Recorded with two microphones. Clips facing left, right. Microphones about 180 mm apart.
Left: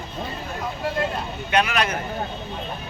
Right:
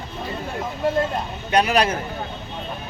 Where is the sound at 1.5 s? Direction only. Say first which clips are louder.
Right 3 dB; 35° right (ahead or behind).